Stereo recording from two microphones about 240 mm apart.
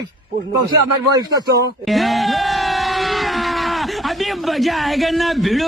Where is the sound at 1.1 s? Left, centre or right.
Centre.